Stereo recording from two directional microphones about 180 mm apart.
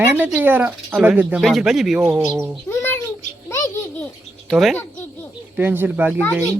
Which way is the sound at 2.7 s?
15° left (ahead or behind).